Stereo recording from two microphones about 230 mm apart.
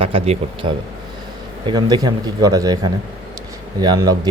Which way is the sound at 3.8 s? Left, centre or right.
Centre.